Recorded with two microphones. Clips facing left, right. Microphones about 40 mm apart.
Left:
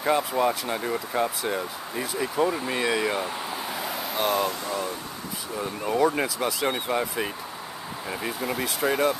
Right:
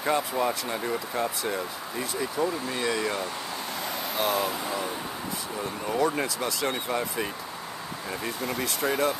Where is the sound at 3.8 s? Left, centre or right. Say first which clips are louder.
Left 1 dB; centre.